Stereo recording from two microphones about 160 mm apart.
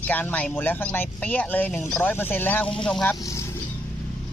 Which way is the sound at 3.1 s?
20° left (ahead or behind).